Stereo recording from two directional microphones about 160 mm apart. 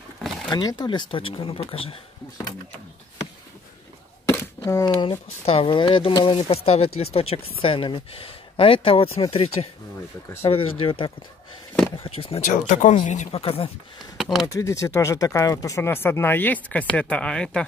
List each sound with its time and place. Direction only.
0.5 s speech: 25° left (ahead or behind)
4.6 s speech: 20° left (ahead or behind)
5.4 s speech: 35° left (ahead or behind)
12.4 s speech: 50° left (ahead or behind)
14.1 s a sound: 5° right (ahead or behind)
14.5 s speech: 20° left (ahead or behind)